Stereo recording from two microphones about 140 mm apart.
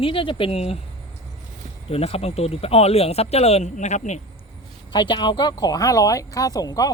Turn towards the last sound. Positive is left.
turn(degrees=25)  # may be behind; listen again after turning